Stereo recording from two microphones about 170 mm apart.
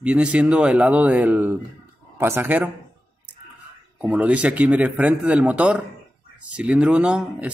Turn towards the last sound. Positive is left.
turn(degrees=-5)  # may be behind; listen again after turning